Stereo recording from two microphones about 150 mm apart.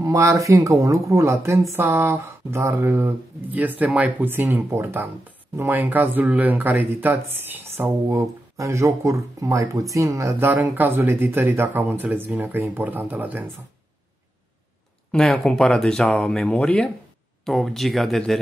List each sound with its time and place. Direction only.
0.0 s speech: 20° right (ahead or behind)
15.0 s speech: 5° left (ahead or behind)